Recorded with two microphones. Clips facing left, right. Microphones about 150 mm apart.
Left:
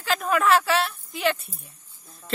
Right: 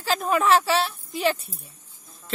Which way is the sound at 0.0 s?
30° right (ahead or behind).